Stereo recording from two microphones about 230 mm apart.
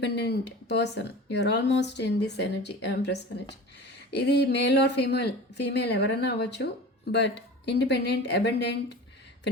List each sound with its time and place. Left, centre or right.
0.0 s speech: left